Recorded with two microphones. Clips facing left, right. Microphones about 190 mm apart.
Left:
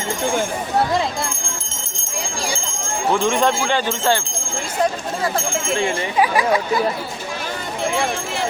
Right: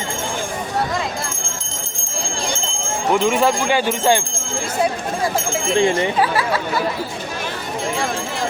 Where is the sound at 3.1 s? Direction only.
10° right (ahead or behind).